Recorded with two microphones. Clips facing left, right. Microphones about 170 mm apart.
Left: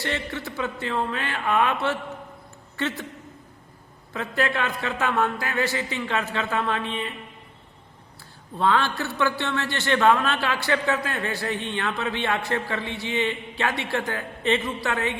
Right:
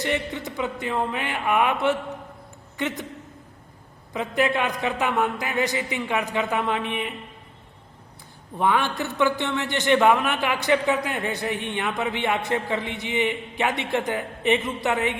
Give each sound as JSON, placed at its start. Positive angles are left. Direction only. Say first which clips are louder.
{"t": 0.0, "sound": "a man's voice", "louder": "right 3 dB", "side_deg": -15}
{"t": 4.1, "sound": "a man's voice", "louder": "right 3 dB", "side_deg": -15}
{"t": 8.5, "sound": "a man's voice", "louder": "even", "side_deg": -15}